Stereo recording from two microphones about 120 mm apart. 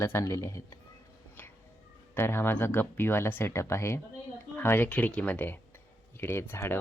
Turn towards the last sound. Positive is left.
turn(degrees=20)  # may be behind; listen again after turning